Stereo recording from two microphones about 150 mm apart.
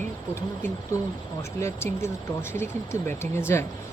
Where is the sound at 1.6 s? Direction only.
20° left (ahead or behind).